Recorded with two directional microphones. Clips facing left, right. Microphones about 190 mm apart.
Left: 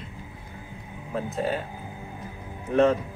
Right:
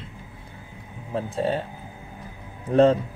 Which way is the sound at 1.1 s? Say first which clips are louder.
Right 2 dB; 30° right (ahead or behind).